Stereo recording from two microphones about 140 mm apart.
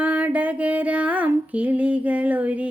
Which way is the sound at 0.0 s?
10° right (ahead or behind).